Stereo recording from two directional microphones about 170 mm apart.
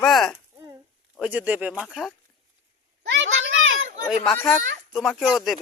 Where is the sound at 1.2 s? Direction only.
10° right (ahead or behind).